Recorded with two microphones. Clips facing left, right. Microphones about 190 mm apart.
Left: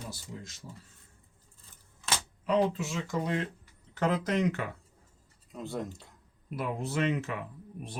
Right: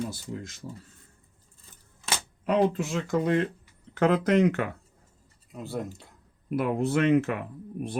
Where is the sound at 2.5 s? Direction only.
55° right (ahead or behind).